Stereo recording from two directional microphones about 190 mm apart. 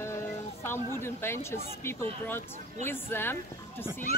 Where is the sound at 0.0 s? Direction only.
15° left (ahead or behind).